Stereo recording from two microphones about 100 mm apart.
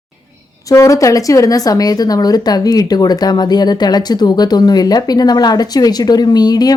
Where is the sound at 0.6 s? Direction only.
30° left (ahead or behind).